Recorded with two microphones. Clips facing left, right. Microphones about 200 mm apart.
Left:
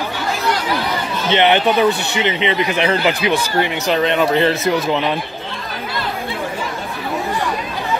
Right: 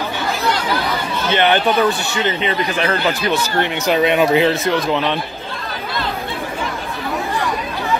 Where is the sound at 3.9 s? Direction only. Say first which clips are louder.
Right 2 dB; 10° right (ahead or behind); by 5.1 s 5° left (ahead or behind).